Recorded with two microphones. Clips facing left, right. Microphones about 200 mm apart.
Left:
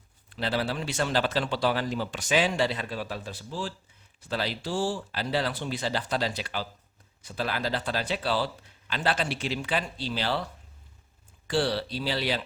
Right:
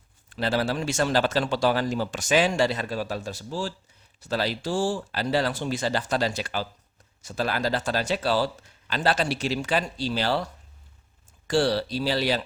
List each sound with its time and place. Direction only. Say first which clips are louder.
0.3 s a man's voice: right 4 dB; 45° right (ahead or behind)